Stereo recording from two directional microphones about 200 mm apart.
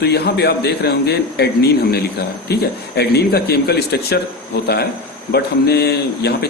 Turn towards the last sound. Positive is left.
turn(degrees=55)  # may be behind; listen again after turning